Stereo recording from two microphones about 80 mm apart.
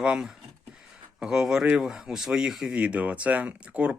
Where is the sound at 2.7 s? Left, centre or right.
Centre.